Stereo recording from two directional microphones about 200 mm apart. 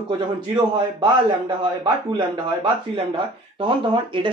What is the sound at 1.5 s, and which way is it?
Speech, 25° right (ahead or behind).